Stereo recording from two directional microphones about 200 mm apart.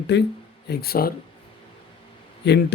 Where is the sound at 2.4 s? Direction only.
55° left (ahead or behind).